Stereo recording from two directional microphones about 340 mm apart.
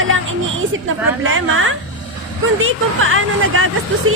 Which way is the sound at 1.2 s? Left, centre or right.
Right.